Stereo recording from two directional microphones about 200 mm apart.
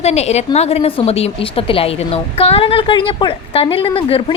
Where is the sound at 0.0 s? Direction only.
30° left (ahead or behind).